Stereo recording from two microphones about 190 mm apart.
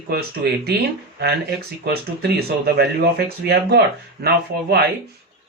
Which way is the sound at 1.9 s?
55° right (ahead or behind).